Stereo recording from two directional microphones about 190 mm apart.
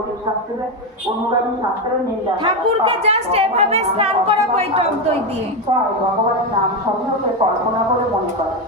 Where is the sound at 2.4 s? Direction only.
30° right (ahead or behind).